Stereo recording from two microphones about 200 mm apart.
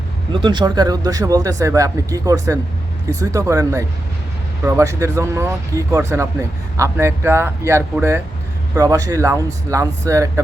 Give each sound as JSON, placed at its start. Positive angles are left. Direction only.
{"t": 0.3, "sound": "speech", "side_deg": -25}